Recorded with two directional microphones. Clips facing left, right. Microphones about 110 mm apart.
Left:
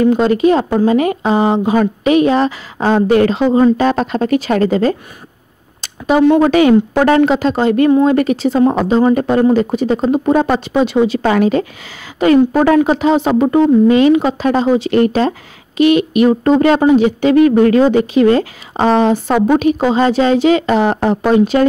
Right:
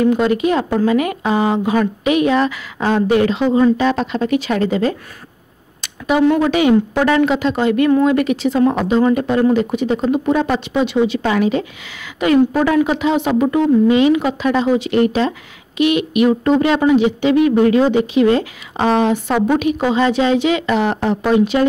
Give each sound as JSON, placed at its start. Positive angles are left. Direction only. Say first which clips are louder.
{"t": 0.0, "sound": "speech", "louder": "left 3 dB", "side_deg": 30}
{"t": 5.8, "sound": "a sound", "louder": "left 3 dB", "side_deg": 35}
{"t": 6.4, "sound": "speech", "louder": "left 4 dB", "side_deg": 45}